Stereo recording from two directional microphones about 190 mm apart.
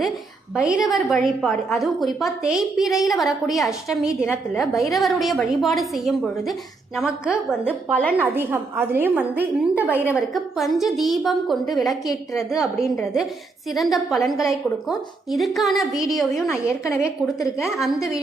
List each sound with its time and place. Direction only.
0.5 s a woman's voice: 5° right (ahead or behind)
16.5 s a woman's voice: 15° left (ahead or behind)